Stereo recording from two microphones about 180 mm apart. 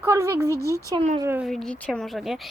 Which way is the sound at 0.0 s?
15° right (ahead or behind).